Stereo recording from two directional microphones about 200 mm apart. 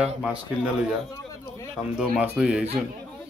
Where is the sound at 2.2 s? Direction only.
5° right (ahead or behind).